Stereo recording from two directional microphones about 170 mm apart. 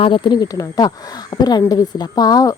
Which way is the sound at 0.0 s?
30° left (ahead or behind).